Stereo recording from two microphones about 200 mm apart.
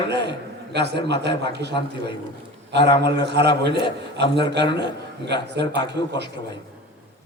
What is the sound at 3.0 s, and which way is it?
Speech, 55° right (ahead or behind).